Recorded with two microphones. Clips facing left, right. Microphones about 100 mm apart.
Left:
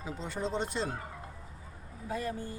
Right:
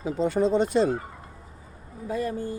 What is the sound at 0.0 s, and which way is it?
Speech, 65° right (ahead or behind).